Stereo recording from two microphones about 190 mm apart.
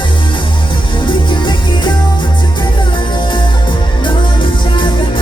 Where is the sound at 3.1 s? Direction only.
25° left (ahead or behind).